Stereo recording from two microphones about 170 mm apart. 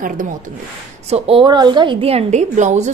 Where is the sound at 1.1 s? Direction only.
30° right (ahead or behind).